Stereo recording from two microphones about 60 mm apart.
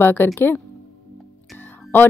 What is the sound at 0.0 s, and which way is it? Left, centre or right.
Speech, left.